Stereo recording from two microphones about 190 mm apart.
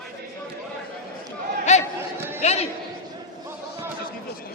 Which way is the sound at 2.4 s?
35° left (ahead or behind).